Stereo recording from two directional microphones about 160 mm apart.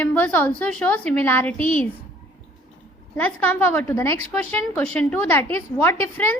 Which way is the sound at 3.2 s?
10° left (ahead or behind).